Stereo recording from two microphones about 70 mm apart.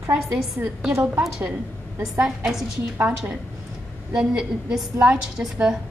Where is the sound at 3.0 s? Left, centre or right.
Right.